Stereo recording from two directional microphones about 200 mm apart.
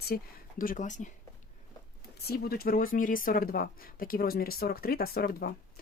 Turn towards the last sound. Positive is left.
turn(degrees=50)  # may be behind; listen again after turning